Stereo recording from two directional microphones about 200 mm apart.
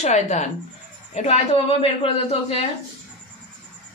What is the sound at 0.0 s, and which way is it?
A woman's voice, 35° left (ahead or behind).